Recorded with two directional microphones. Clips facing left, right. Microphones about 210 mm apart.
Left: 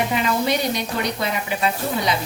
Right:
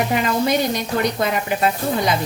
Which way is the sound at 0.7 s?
45° right (ahead or behind).